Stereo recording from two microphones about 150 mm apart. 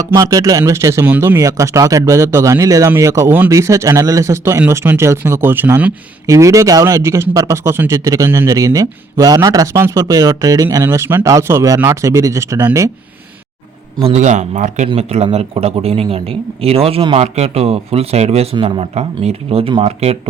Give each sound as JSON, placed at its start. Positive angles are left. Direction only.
{"t": 0.1, "sound": "speech", "side_deg": -20}
{"t": 14.0, "sound": "speech", "side_deg": -50}